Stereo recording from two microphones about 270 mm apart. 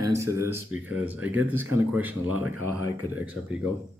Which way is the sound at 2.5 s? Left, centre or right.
Right.